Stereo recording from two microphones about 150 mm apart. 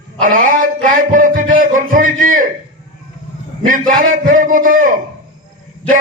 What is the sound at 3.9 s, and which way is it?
A man's voice, 60° right (ahead or behind).